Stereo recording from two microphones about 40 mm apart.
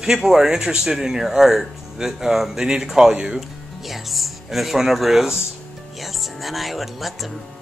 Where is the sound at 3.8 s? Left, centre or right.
Centre.